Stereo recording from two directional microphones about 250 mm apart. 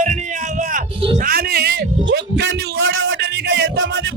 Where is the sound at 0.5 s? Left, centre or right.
Right.